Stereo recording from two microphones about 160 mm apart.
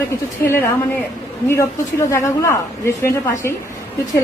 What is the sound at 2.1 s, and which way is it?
A woman's voice, 20° left (ahead or behind).